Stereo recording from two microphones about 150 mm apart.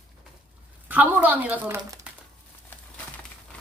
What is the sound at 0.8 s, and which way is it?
Speech, 10° right (ahead or behind).